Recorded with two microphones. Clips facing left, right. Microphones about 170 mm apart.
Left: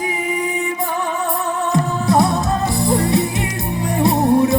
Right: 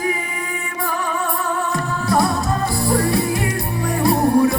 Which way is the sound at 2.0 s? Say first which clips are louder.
Left 1 dB; 20° left (ahead or behind).